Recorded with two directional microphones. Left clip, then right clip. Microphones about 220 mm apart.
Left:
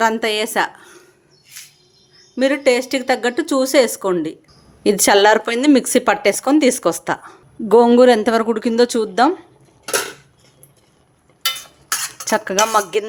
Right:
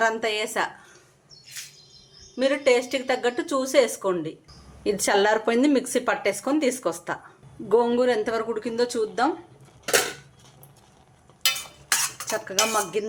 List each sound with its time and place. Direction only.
0.0 s speech: 50° left (ahead or behind)
2.3 s speech: 45° left (ahead or behind)
12.3 s speech: 45° left (ahead or behind)